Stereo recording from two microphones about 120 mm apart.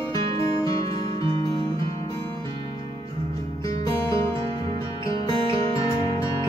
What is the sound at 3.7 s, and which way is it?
Music, 25° left (ahead or behind).